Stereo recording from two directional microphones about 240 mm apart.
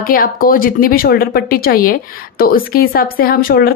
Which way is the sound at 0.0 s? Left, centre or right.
Left.